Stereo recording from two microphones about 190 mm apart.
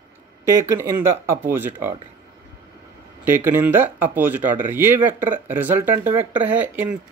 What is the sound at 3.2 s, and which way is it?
Speech, 10° right (ahead or behind).